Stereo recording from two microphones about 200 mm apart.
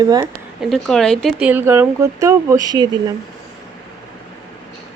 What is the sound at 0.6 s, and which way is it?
Speech, centre (ahead or behind).